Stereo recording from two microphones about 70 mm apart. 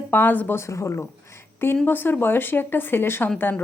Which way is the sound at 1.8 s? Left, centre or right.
Left.